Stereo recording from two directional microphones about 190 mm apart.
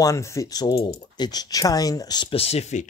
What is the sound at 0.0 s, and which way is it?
Speech, 15° left (ahead or behind).